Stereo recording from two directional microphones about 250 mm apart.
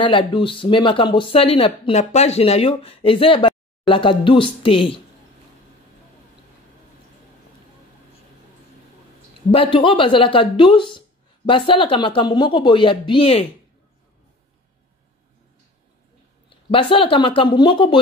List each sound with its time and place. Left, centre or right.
0.0 s speech: centre
9.5 s speech: left
16.4 s speech: left